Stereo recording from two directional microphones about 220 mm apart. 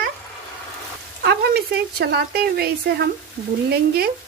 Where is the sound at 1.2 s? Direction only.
45° right (ahead or behind).